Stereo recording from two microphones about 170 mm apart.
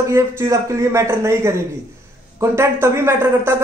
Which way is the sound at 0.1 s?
15° right (ahead or behind).